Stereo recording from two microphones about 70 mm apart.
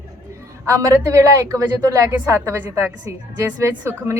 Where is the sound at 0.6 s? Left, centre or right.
Right.